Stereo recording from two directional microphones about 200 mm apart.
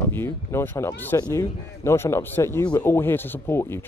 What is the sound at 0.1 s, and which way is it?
Speech, 10° left (ahead or behind).